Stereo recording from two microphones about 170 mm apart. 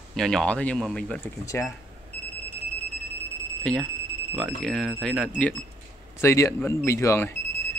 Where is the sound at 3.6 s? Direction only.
5° left (ahead or behind).